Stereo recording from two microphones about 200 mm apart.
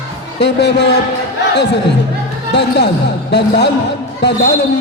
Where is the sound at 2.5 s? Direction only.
55° left (ahead or behind).